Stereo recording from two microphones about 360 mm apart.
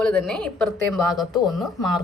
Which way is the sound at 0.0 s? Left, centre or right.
Centre.